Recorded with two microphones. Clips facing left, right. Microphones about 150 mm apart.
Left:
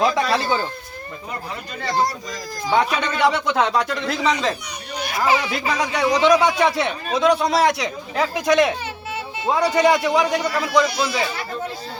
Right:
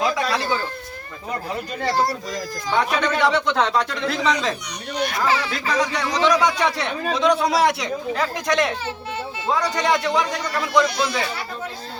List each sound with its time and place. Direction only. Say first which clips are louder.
0.3 s speech: left 2 dB; 25° left (ahead or behind)
2.6 s speech: left 1 dB; 10° left (ahead or behind)
5.2 s a man's voice: left 6 dB; 15° left (ahead or behind)
7.4 s a man's voice: left 1 dB; 10° right (ahead or behind)
8.1 s speech: left 5 dB; 5° left (ahead or behind)